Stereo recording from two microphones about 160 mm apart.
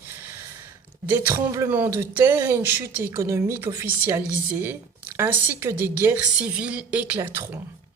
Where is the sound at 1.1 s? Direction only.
15° right (ahead or behind).